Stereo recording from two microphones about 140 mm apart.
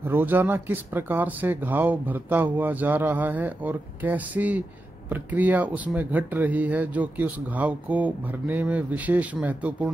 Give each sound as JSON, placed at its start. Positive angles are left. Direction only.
{"t": 0.0, "sound": "speech", "side_deg": -15}